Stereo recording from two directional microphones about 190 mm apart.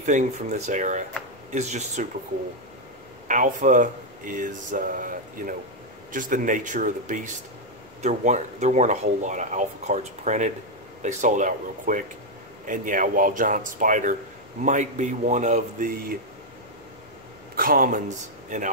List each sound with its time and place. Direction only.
0.0 s speech: 40° right (ahead or behind)
3.3 s speech: 40° right (ahead or behind)
17.6 s speech: 50° right (ahead or behind)